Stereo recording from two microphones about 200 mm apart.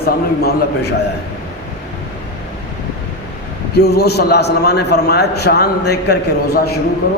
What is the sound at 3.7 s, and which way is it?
A man's voice, 55° left (ahead or behind).